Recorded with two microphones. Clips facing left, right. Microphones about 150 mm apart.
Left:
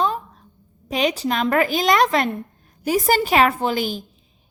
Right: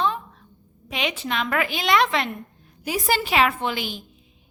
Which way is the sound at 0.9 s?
40° left (ahead or behind).